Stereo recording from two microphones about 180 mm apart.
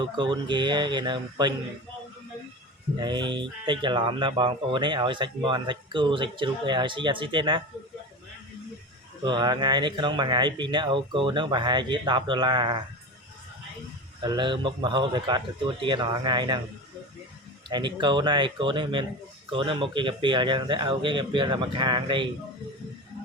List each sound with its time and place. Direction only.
0.0 s speech: 25° right (ahead or behind)
3.0 s speech: 25° right (ahead or behind)
9.2 s speech: 25° right (ahead or behind)
14.2 s speech: 25° right (ahead or behind)
17.7 s speech: 25° right (ahead or behind)